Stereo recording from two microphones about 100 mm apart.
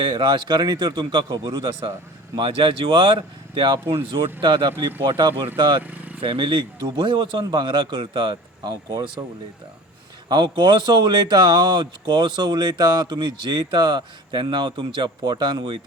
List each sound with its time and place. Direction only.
0.0 s speech: 50° right (ahead or behind)
10.2 s speech: 50° right (ahead or behind)